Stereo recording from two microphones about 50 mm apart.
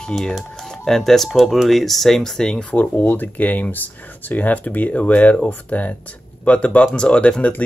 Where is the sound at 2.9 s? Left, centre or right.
Left.